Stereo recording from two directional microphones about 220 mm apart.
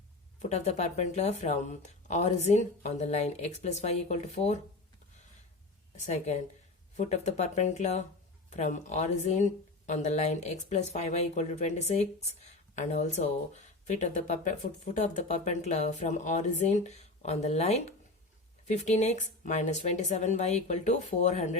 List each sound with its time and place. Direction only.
0.4 s speech: 30° left (ahead or behind)
6.0 s speech: 30° left (ahead or behind)